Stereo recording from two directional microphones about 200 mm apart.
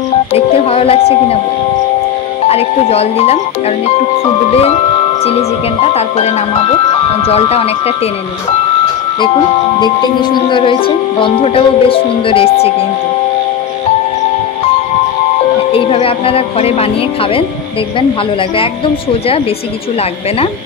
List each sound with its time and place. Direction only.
0.3 s music: 30° left (ahead or behind)
2.4 s speech: 30° left (ahead or behind)
5.8 s speech: 30° left (ahead or behind)
9.8 s speech: 20° left (ahead or behind)
15.7 s speech: 25° left (ahead or behind)